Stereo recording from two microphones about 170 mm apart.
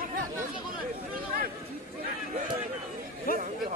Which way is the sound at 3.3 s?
55° left (ahead or behind).